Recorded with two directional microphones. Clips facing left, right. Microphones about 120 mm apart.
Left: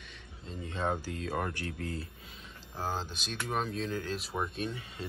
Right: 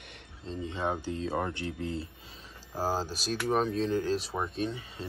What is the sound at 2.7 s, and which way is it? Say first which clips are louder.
Speech: right 5 dB; 40° right (ahead or behind).